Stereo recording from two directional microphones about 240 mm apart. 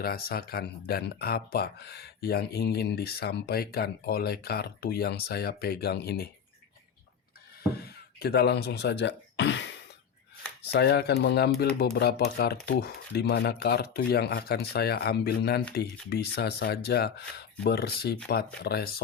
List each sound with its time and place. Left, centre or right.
0.0 s speech: left
7.8 s speech: left